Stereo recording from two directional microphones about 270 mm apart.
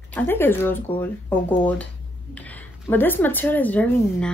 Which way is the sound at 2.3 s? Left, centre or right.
Centre.